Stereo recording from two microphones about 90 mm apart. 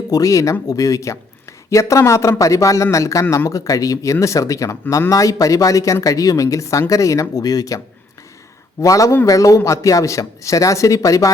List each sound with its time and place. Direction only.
0.1 s a man's voice: 40° left (ahead or behind)
8.8 s a man's voice: 40° left (ahead or behind)